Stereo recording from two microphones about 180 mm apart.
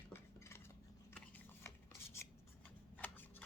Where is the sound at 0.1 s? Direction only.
15° left (ahead or behind).